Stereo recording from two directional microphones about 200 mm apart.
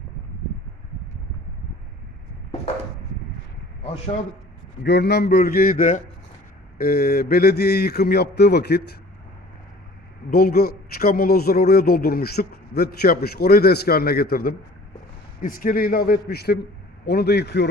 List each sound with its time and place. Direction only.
4.8 s a man's voice: 55° left (ahead or behind)
10.2 s a man's voice: 50° left (ahead or behind)